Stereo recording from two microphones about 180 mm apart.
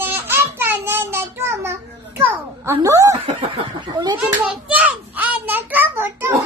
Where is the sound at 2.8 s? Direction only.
15° right (ahead or behind).